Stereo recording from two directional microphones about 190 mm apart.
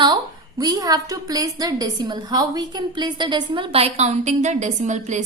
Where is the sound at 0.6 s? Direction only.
20° right (ahead or behind).